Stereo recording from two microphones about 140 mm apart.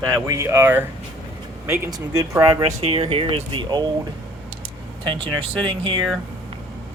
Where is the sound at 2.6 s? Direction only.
45° right (ahead or behind).